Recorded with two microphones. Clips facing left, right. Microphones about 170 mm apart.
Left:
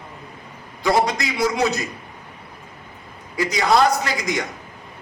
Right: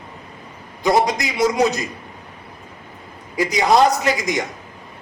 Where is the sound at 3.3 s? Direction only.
20° right (ahead or behind).